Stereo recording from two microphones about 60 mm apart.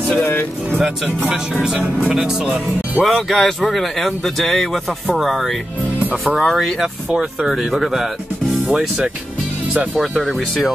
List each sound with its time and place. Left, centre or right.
0.2 s speech: left
0.7 s speech: centre
2.1 s speech: centre